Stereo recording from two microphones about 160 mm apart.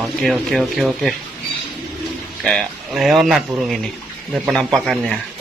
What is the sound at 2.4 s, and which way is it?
Speech, centre (ahead or behind).